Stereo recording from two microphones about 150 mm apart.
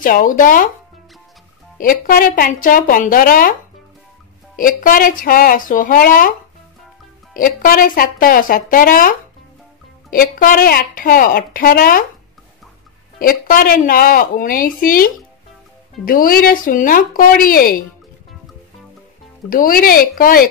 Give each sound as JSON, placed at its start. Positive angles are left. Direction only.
{"t": 0.0, "sound": "speech", "side_deg": 65}
{"t": 1.8, "sound": "a woman's voice", "side_deg": 70}
{"t": 4.6, "sound": "a woman's voice", "side_deg": 65}
{"t": 7.3, "sound": "a woman's voice", "side_deg": 65}
{"t": 10.1, "sound": "a woman's voice", "side_deg": 70}
{"t": 13.2, "sound": "a woman's voice", "side_deg": 70}
{"t": 16.1, "sound": "a woman's voice", "side_deg": 70}
{"t": 19.5, "sound": "a woman's voice", "side_deg": 70}